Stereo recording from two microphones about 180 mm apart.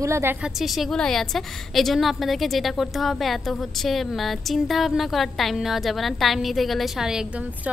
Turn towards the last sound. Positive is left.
turn(degrees=-5)  # may be behind; listen again after turning